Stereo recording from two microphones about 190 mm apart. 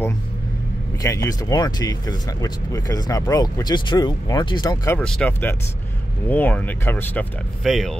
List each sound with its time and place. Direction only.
1.0 s speech: 15° left (ahead or behind)
4.9 s speech: 5° left (ahead or behind)
7.6 s speech: centre (ahead or behind)